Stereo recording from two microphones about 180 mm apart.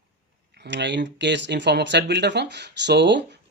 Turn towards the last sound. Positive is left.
turn(degrees=-75)  # may be behind; listen again after turning